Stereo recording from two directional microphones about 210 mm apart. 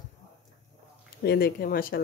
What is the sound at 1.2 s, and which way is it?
Speech, 45° left (ahead or behind).